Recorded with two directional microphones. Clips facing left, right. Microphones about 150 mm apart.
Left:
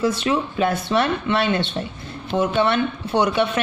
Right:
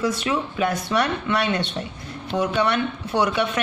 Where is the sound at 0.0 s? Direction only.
25° left (ahead or behind).